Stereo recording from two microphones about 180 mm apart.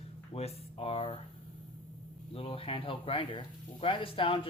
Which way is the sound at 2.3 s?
30° left (ahead or behind).